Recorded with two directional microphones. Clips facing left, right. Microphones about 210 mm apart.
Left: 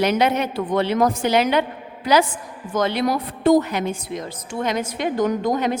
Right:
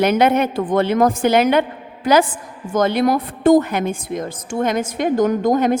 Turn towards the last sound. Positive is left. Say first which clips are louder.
# right 5 dB
turn(degrees=-45)  # may be behind; listen again after turning